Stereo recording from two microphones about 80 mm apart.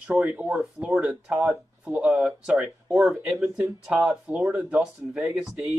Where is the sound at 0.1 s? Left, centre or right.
Centre.